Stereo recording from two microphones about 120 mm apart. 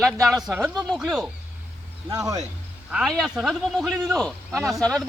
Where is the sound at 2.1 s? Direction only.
30° right (ahead or behind).